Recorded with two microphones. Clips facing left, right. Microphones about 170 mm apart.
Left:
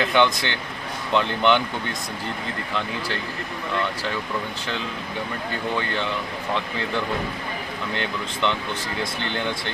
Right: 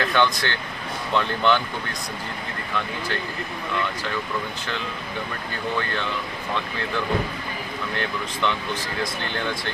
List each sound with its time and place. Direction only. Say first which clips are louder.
0.0 s speech: left 2 dB; 20° left (ahead or behind)
7.9 s speech: even; 20° left (ahead or behind)